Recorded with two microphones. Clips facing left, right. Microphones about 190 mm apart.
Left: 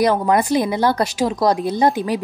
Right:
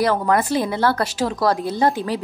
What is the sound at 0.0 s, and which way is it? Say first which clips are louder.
A woman's voice: left 2 dB; 15° left (ahead or behind).